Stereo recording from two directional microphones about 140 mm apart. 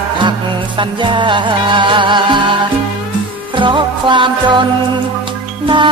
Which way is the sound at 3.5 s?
35° right (ahead or behind).